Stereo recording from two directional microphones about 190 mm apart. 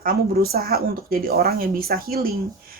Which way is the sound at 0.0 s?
50° right (ahead or behind).